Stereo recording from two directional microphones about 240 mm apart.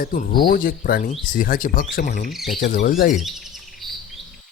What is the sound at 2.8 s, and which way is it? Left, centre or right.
Speech, left.